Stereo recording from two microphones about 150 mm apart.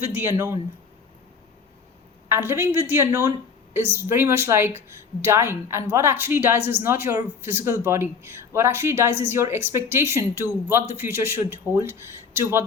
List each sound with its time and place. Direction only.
0.0 s a woman's voice: 15° right (ahead or behind)
2.3 s a woman's voice: 15° right (ahead or behind)